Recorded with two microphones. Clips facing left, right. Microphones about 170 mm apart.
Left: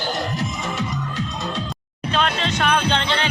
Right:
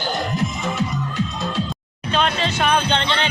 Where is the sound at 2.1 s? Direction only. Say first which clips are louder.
Right 1 dB; centre (ahead or behind).